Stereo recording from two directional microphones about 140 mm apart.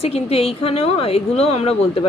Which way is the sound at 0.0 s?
45° left (ahead or behind).